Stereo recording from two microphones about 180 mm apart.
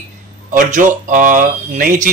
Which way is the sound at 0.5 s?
45° right (ahead or behind).